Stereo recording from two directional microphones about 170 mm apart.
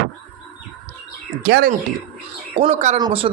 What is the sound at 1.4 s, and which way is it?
Speech, 70° right (ahead or behind).